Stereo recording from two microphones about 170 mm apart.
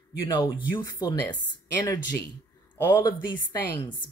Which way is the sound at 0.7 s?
25° left (ahead or behind).